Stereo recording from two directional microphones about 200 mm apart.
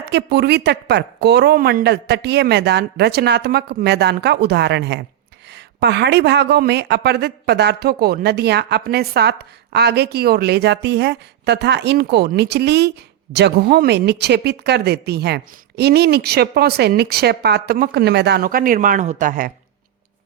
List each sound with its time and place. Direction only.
0.1 s a woman's voice: 55° right (ahead or behind)